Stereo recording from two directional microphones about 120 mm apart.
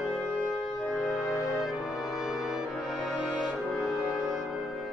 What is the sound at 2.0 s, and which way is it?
Music, 25° left (ahead or behind).